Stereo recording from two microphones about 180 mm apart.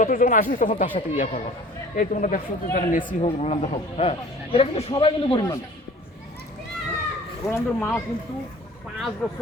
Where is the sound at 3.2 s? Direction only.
35° left (ahead or behind).